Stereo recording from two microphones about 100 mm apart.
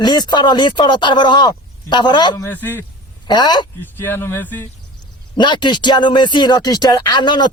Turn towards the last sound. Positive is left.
turn(degrees=45)  # may be behind; listen again after turning